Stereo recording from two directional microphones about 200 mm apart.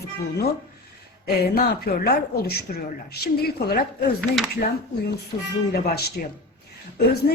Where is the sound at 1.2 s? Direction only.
50° left (ahead or behind).